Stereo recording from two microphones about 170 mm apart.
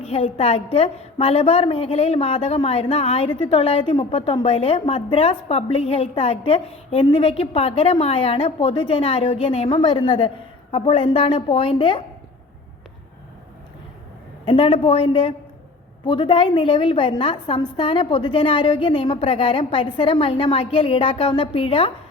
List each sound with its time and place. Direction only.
0.0 s a woman's voice: 35° left (ahead or behind)
14.4 s a woman's voice: 35° left (ahead or behind)